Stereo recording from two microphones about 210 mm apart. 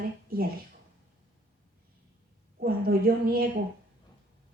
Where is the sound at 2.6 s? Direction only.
45° right (ahead or behind).